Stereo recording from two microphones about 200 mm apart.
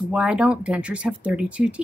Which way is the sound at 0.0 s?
5° right (ahead or behind).